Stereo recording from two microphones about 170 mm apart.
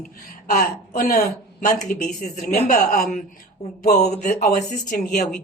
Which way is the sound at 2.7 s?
65° left (ahead or behind).